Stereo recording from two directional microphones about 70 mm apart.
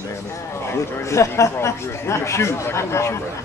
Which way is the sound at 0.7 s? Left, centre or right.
Left.